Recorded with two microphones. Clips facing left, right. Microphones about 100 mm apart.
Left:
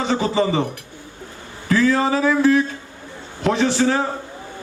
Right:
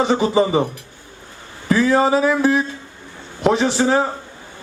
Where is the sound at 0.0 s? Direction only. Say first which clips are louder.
Right 3 dB; 20° right (ahead or behind).